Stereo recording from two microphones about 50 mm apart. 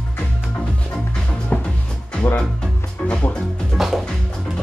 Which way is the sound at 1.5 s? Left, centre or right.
Left.